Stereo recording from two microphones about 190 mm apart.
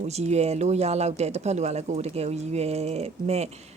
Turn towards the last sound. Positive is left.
turn(degrees=-35)  # may be behind; listen again after turning